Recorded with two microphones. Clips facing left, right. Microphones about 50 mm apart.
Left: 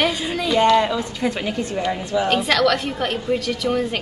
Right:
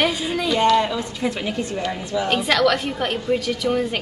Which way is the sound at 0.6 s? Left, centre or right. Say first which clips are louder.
Left 2 dB; left.